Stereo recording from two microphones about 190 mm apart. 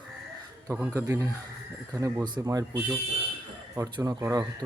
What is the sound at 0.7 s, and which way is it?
Speech, 15° right (ahead or behind).